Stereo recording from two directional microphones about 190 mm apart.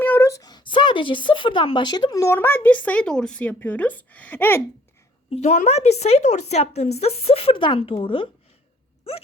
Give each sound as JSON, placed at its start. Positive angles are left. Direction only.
{"t": 0.0, "sound": "speech", "side_deg": 10}
{"t": 5.3, "sound": "a woman's voice", "side_deg": 35}